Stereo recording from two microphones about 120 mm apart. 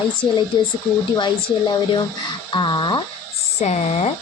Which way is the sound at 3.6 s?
65° left (ahead or behind).